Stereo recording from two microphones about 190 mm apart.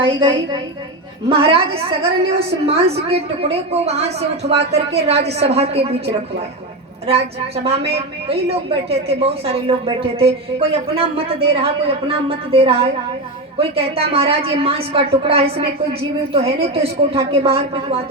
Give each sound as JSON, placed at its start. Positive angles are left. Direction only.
{"t": 0.0, "sound": "a woman's voice", "side_deg": -25}
{"t": 7.1, "sound": "a woman's voice", "side_deg": -30}